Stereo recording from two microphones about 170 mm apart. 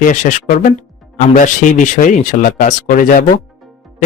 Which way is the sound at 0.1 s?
50° left (ahead or behind).